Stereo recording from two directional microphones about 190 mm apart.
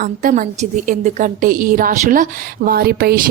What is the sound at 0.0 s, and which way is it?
A woman's voice, 45° right (ahead or behind).